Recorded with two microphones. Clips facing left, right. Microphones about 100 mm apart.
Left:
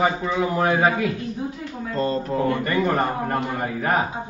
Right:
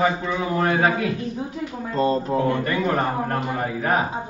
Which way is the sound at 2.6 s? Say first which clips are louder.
Left 1 dB; centre (ahead or behind).